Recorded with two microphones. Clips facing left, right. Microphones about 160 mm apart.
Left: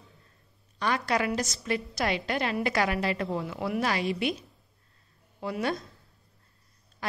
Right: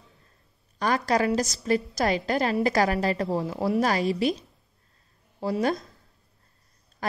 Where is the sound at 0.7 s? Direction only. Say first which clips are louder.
Right 4 dB; 40° right (ahead or behind).